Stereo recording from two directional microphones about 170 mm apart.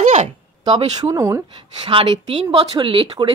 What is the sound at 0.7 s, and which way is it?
Speech, 20° right (ahead or behind).